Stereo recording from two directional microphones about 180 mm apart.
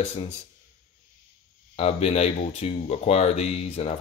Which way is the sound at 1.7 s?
35° left (ahead or behind).